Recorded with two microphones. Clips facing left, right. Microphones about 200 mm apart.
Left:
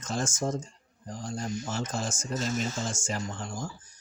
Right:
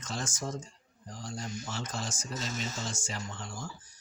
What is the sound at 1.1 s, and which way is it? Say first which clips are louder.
Speech: left 6 dB; 45° left (ahead or behind).